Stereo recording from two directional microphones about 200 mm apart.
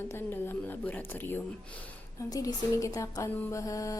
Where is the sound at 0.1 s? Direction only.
10° left (ahead or behind).